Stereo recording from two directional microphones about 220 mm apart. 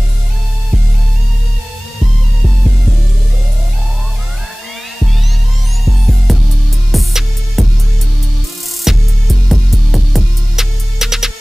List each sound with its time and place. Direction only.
6.3 s music: centre (ahead or behind)
8.9 s music: centre (ahead or behind)